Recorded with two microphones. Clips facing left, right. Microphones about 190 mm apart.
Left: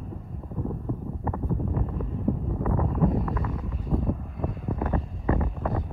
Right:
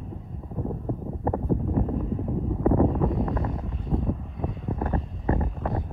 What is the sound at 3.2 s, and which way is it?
Wind noise, 30° right (ahead or behind).